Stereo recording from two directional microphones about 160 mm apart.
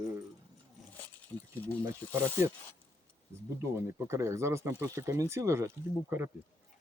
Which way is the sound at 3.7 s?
15° right (ahead or behind).